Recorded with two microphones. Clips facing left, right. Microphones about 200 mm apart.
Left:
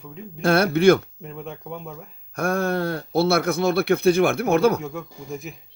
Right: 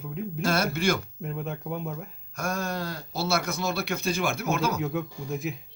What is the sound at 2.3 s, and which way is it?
Speech, 55° left (ahead or behind).